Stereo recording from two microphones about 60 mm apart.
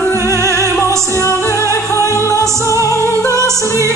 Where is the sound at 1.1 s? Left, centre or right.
Left.